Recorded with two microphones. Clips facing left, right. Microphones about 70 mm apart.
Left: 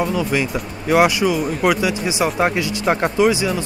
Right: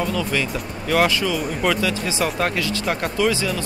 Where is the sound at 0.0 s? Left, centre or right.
Centre.